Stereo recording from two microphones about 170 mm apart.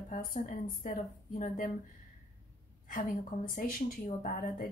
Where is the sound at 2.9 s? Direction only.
50° left (ahead or behind).